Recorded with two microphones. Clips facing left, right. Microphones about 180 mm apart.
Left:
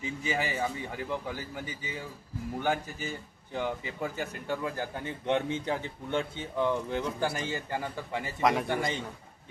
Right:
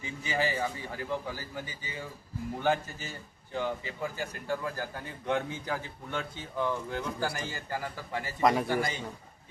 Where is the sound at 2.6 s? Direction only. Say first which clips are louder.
Right 1 dB; 15° left (ahead or behind).